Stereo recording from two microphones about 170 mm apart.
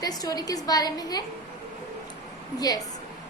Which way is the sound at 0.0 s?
20° left (ahead or behind).